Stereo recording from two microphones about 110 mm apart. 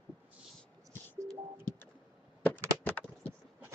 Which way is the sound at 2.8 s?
15° left (ahead or behind).